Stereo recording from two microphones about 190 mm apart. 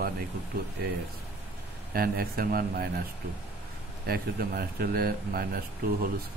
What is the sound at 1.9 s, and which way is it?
Speech, 55° right (ahead or behind).